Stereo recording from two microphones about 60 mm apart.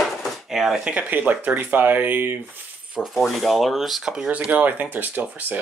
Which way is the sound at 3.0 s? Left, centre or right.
Centre.